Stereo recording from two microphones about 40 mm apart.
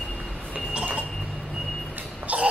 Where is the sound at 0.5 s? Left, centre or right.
Right.